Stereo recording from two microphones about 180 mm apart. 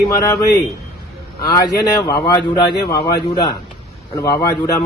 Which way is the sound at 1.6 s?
20° left (ahead or behind).